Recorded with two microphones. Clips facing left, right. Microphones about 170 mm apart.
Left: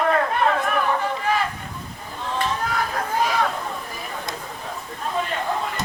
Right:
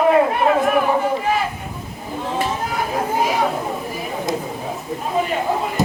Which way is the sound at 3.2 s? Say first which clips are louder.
Right 2 dB; 25° right (ahead or behind).